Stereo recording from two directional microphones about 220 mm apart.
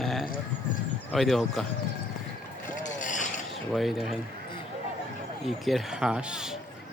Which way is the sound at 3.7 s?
Centre (ahead or behind).